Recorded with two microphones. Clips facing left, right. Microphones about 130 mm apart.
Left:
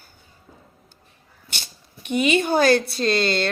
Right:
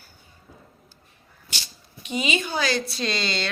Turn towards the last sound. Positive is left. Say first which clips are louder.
# left 7 dB
turn(degrees=50)  # may be behind; listen again after turning